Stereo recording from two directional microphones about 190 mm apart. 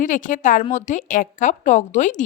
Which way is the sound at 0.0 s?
45° left (ahead or behind).